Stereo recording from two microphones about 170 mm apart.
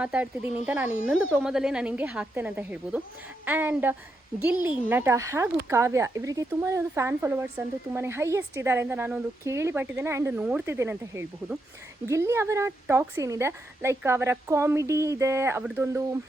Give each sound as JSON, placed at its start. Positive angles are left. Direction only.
{"t": 0.0, "sound": "speech", "side_deg": -5}